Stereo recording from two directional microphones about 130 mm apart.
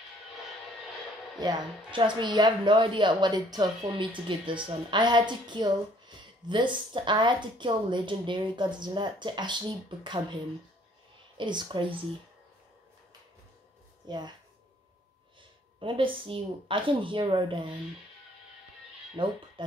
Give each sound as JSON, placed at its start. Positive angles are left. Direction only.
{"t": 1.4, "sound": "a woman's voice", "side_deg": -30}
{"t": 11.3, "sound": "a woman's voice", "side_deg": -35}
{"t": 14.0, "sound": "speech", "side_deg": -35}
{"t": 15.8, "sound": "a woman's voice", "side_deg": -40}
{"t": 19.2, "sound": "a woman's voice", "side_deg": -40}